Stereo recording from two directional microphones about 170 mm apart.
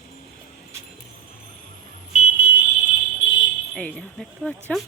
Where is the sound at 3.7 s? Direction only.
5° left (ahead or behind).